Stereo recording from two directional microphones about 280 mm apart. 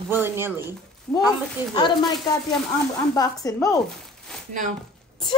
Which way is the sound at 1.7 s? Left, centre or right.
Centre.